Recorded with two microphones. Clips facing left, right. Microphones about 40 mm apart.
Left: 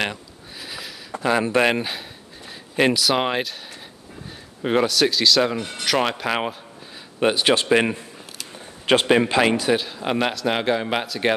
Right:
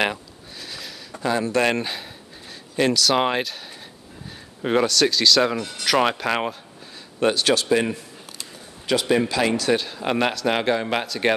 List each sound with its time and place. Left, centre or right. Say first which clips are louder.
0.6 s sniff: left 2 dB; centre
1.3 s speech: left 2 dB; left
1.8 s speech: even; centre
2.7 s speech: left 2 dB; left
3.0 s speech: right 1 dB; centre
7.2 s speech: left 1 dB; left
7.6 s a man's voice: left 2 dB; left
9.7 s speech: even; centre